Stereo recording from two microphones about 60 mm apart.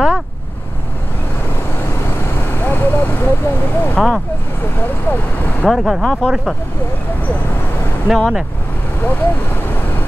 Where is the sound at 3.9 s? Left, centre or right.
Centre.